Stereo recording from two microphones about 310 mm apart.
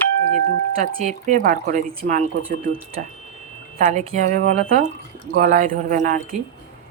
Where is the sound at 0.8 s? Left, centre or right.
Right.